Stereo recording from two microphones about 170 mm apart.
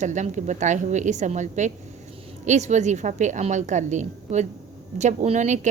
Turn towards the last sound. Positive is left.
turn(degrees=-45)  # may be behind; listen again after turning